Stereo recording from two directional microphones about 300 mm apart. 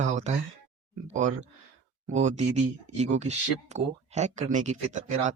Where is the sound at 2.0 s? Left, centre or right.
Right.